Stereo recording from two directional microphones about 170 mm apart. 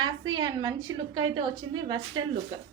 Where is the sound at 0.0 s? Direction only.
25° right (ahead or behind).